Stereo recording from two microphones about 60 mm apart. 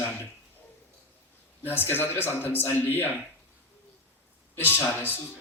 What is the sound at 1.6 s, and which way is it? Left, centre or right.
A man's voice, left.